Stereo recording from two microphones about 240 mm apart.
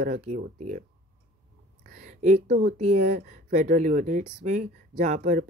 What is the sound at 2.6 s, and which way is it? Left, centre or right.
Speech, right.